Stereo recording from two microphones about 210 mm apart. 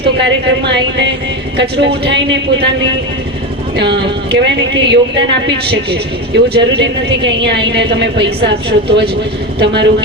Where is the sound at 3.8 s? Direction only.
55° right (ahead or behind).